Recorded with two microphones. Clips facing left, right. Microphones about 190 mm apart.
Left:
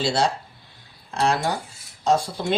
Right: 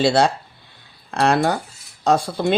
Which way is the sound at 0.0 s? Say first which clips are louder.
Right 6 dB; 60° right (ahead or behind).